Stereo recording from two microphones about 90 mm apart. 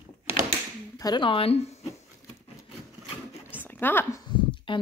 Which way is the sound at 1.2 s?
80° left.